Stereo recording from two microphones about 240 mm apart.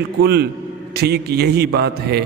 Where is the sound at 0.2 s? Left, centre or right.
Right.